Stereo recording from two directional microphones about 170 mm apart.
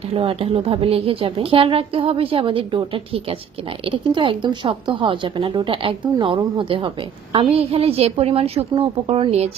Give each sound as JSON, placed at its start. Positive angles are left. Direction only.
{"t": 0.1, "sound": "a woman's voice", "side_deg": -35}